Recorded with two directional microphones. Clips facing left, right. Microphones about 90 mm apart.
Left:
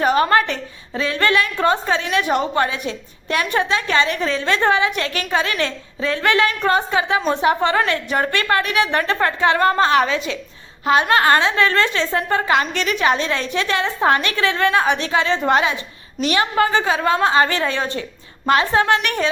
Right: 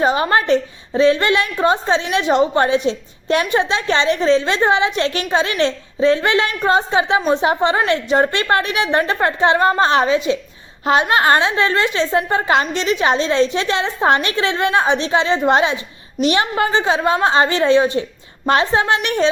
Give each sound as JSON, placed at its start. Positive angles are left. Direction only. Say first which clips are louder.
{"t": 0.0, "sound": "a woman's voice", "louder": "even", "side_deg": -20}